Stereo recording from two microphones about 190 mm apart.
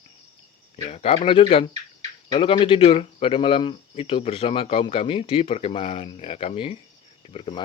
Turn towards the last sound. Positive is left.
turn(degrees=30)  # may be behind; listen again after turning